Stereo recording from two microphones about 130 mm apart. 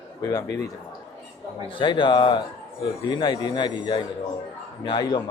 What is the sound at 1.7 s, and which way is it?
Speech, 40° left (ahead or behind).